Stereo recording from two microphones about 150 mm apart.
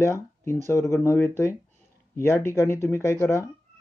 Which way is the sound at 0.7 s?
20° left (ahead or behind).